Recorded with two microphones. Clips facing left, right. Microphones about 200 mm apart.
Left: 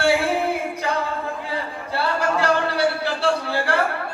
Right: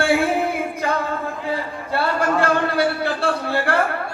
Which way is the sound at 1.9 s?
55° right (ahead or behind).